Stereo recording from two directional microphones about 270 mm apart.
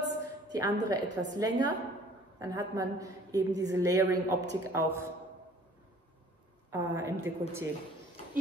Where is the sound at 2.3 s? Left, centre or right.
Centre.